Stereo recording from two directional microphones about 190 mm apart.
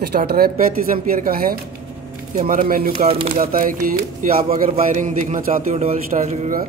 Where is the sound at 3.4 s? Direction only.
45° right (ahead or behind).